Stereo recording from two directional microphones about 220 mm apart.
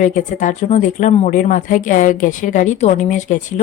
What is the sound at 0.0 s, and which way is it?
A woman's voice, 35° left (ahead or behind).